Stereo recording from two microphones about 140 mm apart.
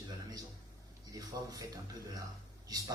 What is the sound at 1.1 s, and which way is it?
Speech, 25° right (ahead or behind).